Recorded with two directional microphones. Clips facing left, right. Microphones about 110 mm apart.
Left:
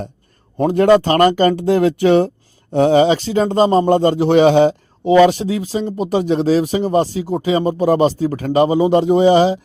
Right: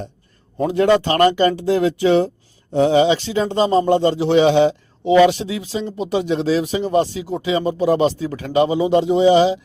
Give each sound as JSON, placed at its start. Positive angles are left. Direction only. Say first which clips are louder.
{"t": 0.7, "sound": "speech", "louder": "left 4 dB", "side_deg": 45}